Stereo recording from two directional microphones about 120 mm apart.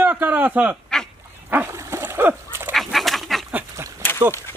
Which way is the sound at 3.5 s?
25° right (ahead or behind).